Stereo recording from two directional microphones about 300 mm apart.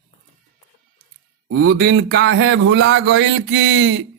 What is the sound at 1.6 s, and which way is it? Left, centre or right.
A man's voice, right.